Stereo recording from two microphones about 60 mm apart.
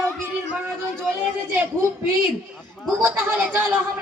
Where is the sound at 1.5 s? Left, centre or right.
Right.